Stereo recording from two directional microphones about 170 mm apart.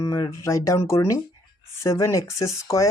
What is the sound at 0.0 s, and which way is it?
Speech, 20° left (ahead or behind).